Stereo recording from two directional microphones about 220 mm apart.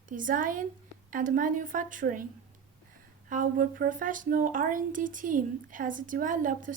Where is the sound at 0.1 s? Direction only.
35° right (ahead or behind).